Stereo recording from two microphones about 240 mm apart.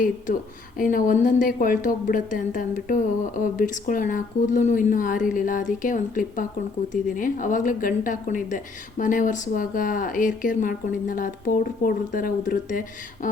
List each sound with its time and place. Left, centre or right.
0.8 s a woman's voice: left